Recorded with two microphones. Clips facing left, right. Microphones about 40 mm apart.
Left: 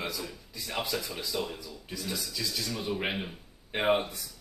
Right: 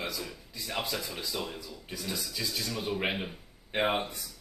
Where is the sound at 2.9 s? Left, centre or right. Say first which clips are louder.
Right 1 dB; centre.